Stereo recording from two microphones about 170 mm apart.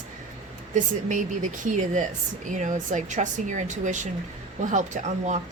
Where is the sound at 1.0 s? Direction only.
50° right (ahead or behind).